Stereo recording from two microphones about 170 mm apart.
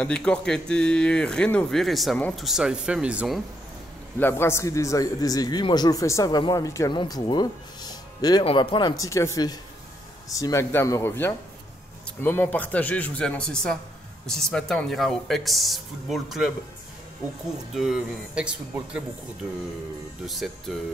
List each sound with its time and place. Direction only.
0.0 s speech: 5° left (ahead or behind)
4.2 s a man's voice: 15° left (ahead or behind); by 16.5 s centre (ahead or behind)
17.7 s speech: 5° right (ahead or behind)
20.2 s speech: centre (ahead or behind)